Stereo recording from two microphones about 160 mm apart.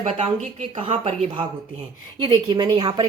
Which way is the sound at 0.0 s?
45° right (ahead or behind).